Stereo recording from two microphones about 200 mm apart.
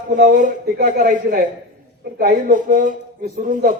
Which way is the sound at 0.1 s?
40° right (ahead or behind).